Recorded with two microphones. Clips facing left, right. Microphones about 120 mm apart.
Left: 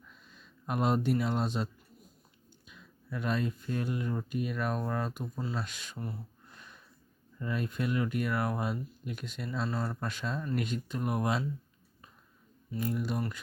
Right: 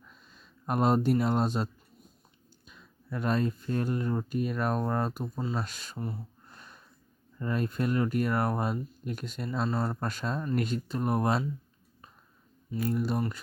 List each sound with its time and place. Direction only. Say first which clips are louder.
0.6 s speech: right 4 dB; 40° right (ahead or behind)
5.5 s speech: right 3 dB; 40° right (ahead or behind)
6.5 s a sound: right 2 dB; 35° right (ahead or behind)
7.3 s speech: right 4 dB; 40° right (ahead or behind)
9.6 s speech: right 5 dB; 25° right (ahead or behind)
10.0 s speech: right 3 dB; 40° right (ahead or behind)
12.9 s speech: right 4 dB; 35° right (ahead or behind)